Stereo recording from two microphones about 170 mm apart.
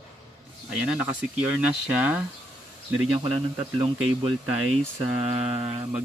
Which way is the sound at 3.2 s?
35° right (ahead or behind).